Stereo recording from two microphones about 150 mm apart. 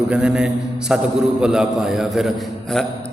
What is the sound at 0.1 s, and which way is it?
A man's voice, 5° right (ahead or behind).